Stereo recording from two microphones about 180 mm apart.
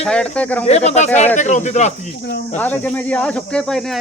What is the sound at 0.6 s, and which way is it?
Speech, 35° left (ahead or behind).